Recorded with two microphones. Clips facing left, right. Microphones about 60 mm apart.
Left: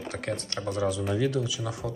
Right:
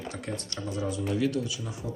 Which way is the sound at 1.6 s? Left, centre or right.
Left.